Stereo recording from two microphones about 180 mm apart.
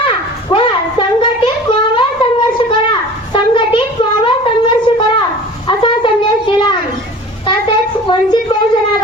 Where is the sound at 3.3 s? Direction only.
25° left (ahead or behind).